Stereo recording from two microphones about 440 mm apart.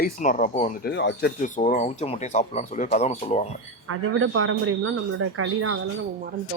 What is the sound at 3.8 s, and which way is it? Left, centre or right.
A man's voice, right.